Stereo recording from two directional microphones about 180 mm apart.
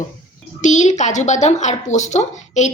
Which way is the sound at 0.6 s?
40° left (ahead or behind).